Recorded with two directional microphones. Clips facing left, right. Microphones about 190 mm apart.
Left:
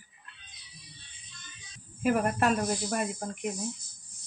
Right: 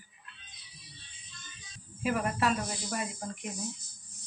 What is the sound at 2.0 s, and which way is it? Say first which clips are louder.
Speech: left 4 dB; 50° left (ahead or behind).